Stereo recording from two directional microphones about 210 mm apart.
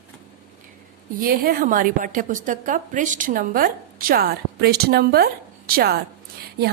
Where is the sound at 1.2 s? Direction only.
45° right (ahead or behind).